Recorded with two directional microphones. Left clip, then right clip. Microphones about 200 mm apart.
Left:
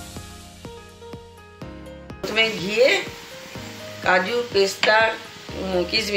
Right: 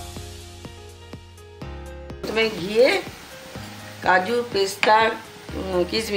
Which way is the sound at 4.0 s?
60° right (ahead or behind).